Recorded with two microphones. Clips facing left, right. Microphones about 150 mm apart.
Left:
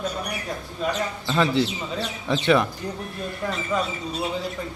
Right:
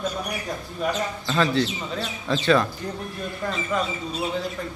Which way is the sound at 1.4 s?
15° left (ahead or behind).